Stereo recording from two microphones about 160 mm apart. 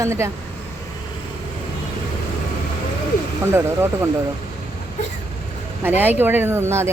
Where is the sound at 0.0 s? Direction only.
15° right (ahead or behind).